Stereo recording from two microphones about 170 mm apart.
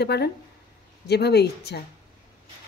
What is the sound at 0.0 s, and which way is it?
Speech, 70° left (ahead or behind).